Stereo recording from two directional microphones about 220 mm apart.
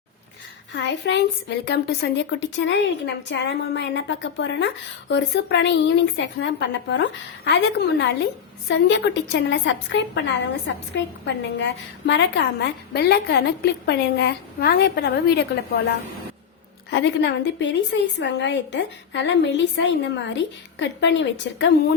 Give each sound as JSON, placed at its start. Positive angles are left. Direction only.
{"t": 0.7, "sound": "a woman's voice", "side_deg": 50}
{"t": 16.9, "sound": "a woman's voice", "side_deg": 55}